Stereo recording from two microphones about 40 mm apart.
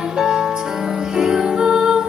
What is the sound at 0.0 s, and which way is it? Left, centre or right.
Music, centre.